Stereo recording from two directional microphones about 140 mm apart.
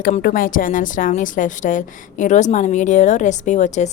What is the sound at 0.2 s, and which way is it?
A woman's voice, 80° left.